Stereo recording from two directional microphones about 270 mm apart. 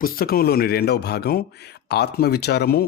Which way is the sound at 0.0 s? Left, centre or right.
Left.